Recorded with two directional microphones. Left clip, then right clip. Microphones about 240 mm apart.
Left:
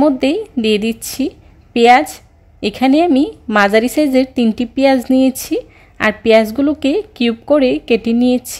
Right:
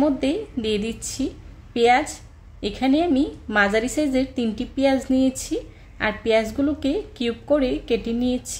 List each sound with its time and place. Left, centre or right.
0.0 s a woman's voice: left